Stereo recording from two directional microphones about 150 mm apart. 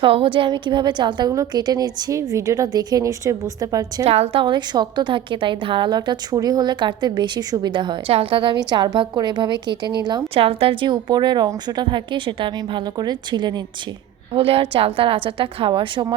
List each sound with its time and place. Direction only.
0.0 s a woman's voice: 35° right (ahead or behind)
4.0 s a woman's voice: 40° right (ahead or behind)
14.3 s a woman's voice: 40° right (ahead or behind)